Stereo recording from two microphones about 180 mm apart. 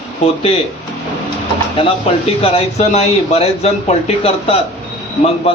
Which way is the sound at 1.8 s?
30° left (ahead or behind).